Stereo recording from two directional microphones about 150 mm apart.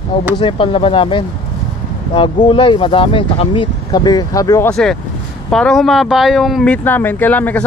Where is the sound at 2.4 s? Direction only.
35° left (ahead or behind).